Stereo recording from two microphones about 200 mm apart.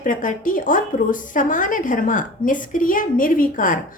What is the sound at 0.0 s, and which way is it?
A woman's voice, 40° left (ahead or behind).